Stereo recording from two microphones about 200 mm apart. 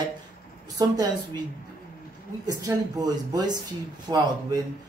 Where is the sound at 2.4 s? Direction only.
20° right (ahead or behind).